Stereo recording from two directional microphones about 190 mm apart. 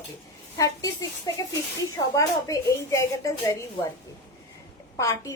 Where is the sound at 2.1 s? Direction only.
15° left (ahead or behind).